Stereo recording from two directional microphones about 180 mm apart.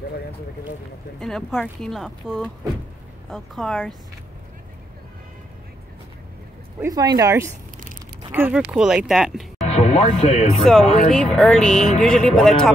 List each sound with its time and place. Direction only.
1.2 s speech: 5° left (ahead or behind)
6.8 s speech: 20° right (ahead or behind); by 9.7 s centre (ahead or behind)
9.7 s speech: 35° left (ahead or behind)
10.6 s speech: centre (ahead or behind)